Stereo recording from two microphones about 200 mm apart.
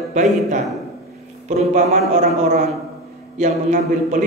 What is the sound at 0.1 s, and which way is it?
A man's voice, 35° right (ahead or behind).